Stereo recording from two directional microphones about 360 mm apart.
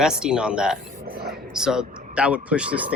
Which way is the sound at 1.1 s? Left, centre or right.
Right.